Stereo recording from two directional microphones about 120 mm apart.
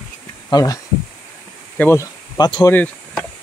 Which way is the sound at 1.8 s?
20° left (ahead or behind).